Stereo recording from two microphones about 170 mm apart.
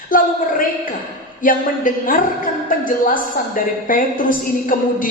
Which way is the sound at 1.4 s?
55° left (ahead or behind).